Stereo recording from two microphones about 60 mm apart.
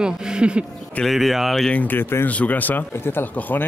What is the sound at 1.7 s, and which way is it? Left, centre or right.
Speech, left.